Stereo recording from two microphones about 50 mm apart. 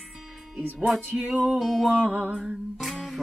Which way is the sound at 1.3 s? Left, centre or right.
Centre.